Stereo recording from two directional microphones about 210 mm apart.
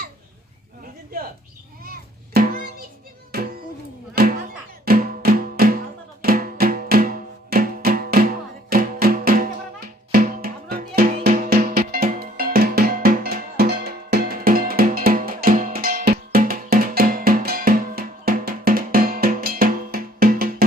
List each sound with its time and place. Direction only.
1.8 s music: 45° right (ahead or behind)